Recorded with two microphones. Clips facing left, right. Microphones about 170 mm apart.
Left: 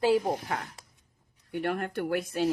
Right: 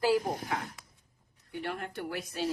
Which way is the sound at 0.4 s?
50° left (ahead or behind).